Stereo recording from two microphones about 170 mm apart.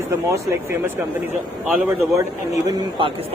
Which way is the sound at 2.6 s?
30° right (ahead or behind).